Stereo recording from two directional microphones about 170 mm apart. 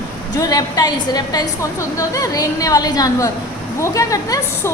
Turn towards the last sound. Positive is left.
turn(degrees=20)  # may be behind; listen again after turning